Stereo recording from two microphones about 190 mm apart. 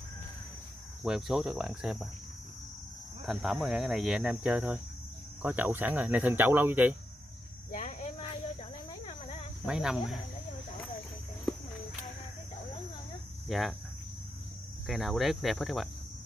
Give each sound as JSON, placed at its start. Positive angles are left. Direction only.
{"t": 1.0, "sound": "speech", "side_deg": 0}
{"t": 3.3, "sound": "speech", "side_deg": 0}
{"t": 7.7, "sound": "cricket", "side_deg": 40}
{"t": 9.7, "sound": "speech", "side_deg": -5}
{"t": 13.5, "sound": "cricket", "side_deg": 0}
{"t": 14.9, "sound": "speech", "side_deg": 0}